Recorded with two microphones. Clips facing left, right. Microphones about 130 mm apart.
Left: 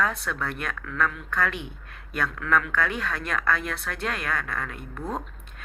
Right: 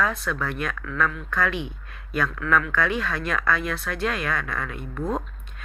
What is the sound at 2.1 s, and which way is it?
Speech, 55° left (ahead or behind).